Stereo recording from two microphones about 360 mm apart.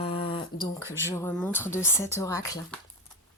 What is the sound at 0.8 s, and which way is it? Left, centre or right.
Speech, centre.